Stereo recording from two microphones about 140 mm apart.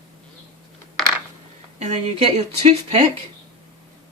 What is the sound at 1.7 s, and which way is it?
Speech, 50° right (ahead or behind).